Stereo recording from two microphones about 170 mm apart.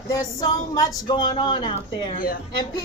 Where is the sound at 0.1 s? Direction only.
20° left (ahead or behind).